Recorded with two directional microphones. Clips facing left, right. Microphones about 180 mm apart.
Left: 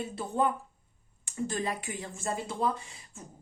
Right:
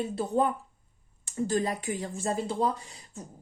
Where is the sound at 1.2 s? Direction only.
40° right (ahead or behind).